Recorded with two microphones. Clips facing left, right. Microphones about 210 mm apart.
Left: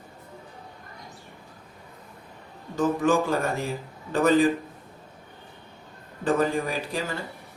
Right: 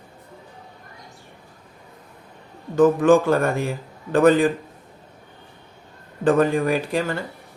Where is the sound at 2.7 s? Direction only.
55° right (ahead or behind).